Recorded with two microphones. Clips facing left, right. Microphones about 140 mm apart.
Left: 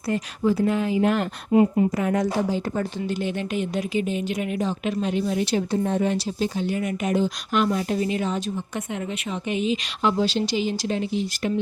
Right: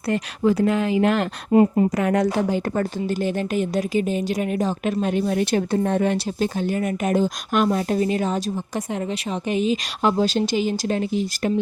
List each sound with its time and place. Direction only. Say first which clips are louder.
0.1 s speech: right 2 dB; 75° right (ahead or behind)
1.5 s speech: right 2 dB; 40° right (ahead or behind)
2.0 s a woman's voice: right 3 dB; 70° right (ahead or behind)
3.1 s speech: right 3 dB; 40° right (ahead or behind)